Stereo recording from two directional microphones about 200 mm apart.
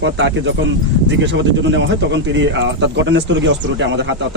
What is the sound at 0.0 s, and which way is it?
Speech, 65° right (ahead or behind).